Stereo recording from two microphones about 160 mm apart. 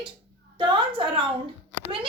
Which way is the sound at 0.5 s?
30° right (ahead or behind).